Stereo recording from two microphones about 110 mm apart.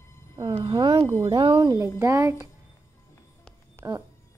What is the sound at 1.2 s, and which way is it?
Speech, 45° right (ahead or behind).